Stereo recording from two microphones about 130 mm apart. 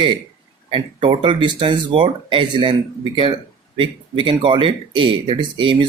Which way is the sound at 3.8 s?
40° right (ahead or behind).